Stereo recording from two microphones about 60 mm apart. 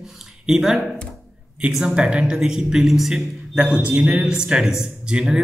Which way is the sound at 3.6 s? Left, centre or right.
Centre.